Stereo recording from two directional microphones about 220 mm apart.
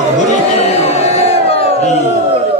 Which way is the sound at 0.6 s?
30° left (ahead or behind).